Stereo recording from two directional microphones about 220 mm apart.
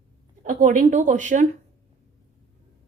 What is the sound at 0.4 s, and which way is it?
A woman's voice, 35° right (ahead or behind).